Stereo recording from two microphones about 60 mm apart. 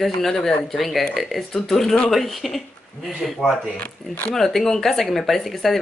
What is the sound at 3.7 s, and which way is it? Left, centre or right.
Speech, left.